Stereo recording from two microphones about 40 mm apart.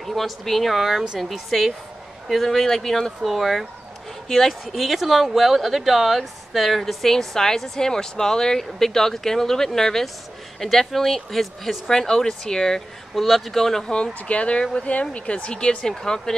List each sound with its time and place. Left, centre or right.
0.0 s a woman's voice: centre
13.1 s speech: centre
13.8 s a woman's voice: left